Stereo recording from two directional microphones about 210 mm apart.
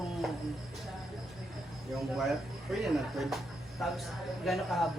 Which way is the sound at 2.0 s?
Centre (ahead or behind).